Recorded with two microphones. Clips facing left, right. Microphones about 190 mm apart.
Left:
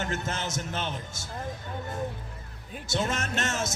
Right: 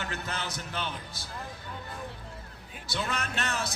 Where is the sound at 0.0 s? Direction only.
45° left (ahead or behind).